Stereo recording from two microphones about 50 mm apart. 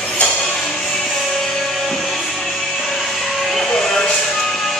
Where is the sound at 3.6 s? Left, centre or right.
Centre.